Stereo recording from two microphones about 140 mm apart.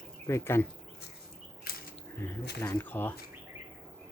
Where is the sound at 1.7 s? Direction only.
90° left.